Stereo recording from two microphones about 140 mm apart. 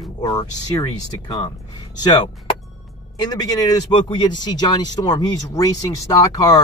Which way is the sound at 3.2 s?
30° left (ahead or behind).